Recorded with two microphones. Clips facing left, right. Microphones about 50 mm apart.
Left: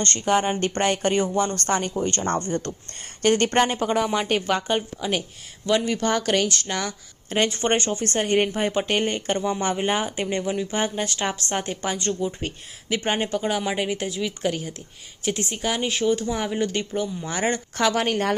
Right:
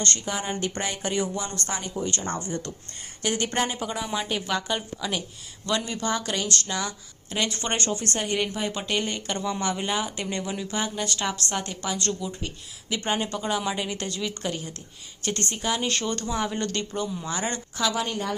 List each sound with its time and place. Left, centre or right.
0.3 s a woman's voice: left
5.9 s a woman's voice: left
12.2 s a woman's voice: left
12.9 s a woman's voice: left; by 16.2 s centre
16.3 s a woman's voice: left
17.7 s speech: left